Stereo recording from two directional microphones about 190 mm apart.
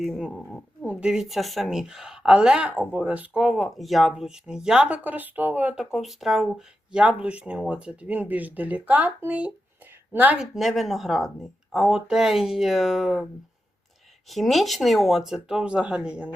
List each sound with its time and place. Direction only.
0.0 s a woman's voice: centre (ahead or behind)
14.3 s a woman's voice: centre (ahead or behind)